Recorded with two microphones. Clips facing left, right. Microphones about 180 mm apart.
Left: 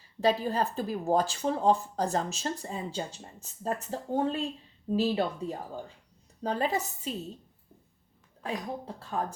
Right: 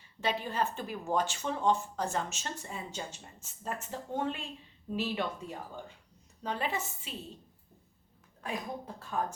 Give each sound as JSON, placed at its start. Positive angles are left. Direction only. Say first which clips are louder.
{"t": 0.2, "sound": "speech", "louder": "left 6 dB", "side_deg": 35}
{"t": 9.0, "sound": "speech", "louder": "even", "side_deg": 30}